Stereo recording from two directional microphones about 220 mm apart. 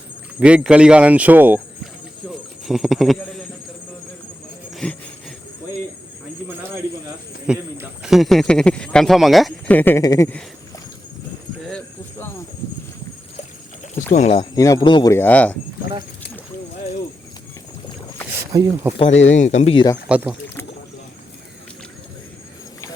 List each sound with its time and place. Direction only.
0.3 s speech: 5° right (ahead or behind)
2.6 s speech: centre (ahead or behind)
4.7 s a sound: 5° left (ahead or behind)
7.4 s speech: 5° right (ahead or behind)
13.9 s speech: 30° left (ahead or behind)
14.5 s speech: 15° left (ahead or behind)
18.5 s speech: 15° right (ahead or behind)
18.9 s speech: 30° left (ahead or behind)
20.1 s speech: 5° right (ahead or behind)